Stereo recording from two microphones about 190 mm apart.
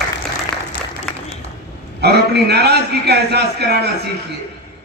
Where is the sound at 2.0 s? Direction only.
60° right (ahead or behind).